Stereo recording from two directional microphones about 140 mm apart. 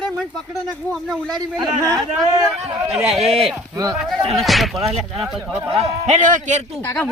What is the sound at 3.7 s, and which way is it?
Speech, 25° right (ahead or behind).